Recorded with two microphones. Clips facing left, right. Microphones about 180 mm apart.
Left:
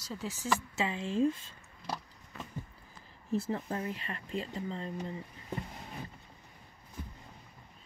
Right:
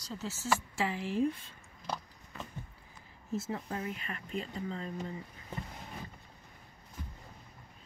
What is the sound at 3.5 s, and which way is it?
Speech, 35° left (ahead or behind).